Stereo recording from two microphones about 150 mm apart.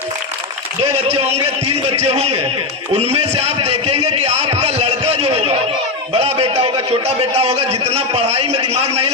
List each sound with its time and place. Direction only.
0.8 s a man's voice: 45° right (ahead or behind)
2.9 s a sound: 45° right (ahead or behind)
6.1 s a man's voice: 45° right (ahead or behind)